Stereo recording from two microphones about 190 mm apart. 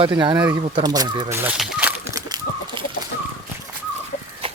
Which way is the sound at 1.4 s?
Centre (ahead or behind).